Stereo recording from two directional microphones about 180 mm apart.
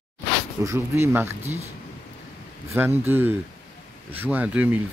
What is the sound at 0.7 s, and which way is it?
Speech, 15° right (ahead or behind).